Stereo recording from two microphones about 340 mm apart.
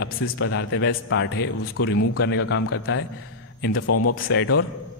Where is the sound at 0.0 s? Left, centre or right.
Left.